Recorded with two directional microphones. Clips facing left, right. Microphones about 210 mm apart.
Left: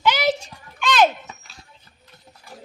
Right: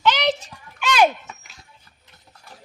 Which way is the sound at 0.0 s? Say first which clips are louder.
Even; 10° left (ahead or behind).